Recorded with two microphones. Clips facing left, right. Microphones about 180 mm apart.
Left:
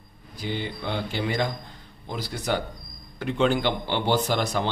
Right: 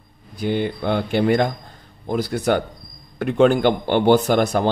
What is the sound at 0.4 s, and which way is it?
Speech, 55° right (ahead or behind).